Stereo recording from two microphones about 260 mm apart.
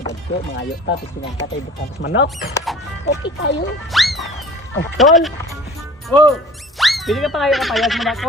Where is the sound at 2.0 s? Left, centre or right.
Left.